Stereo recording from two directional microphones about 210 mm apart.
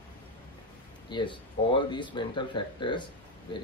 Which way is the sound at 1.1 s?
25° left (ahead or behind).